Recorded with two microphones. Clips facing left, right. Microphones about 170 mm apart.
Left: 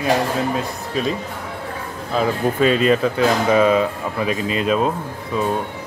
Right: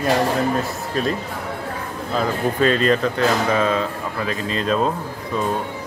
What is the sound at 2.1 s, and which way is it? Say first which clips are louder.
Speech: left 2 dB; 5° left (ahead or behind).